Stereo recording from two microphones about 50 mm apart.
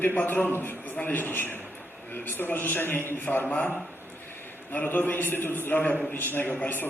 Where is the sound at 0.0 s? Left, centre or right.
Left.